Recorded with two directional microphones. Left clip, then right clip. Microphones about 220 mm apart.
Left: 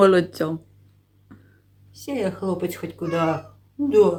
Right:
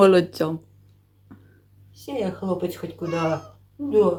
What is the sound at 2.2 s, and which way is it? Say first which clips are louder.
Speech: left 1 dB; 40° left (ahead or behind).